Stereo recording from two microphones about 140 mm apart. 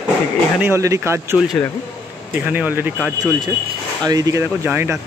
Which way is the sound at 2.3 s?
10° right (ahead or behind).